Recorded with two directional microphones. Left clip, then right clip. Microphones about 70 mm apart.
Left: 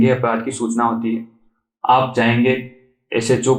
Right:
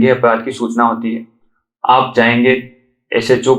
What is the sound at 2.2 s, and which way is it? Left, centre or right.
Speech, right.